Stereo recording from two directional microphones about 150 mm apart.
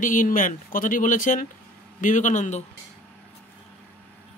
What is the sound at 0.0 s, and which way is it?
A man's voice, 60° left (ahead or behind).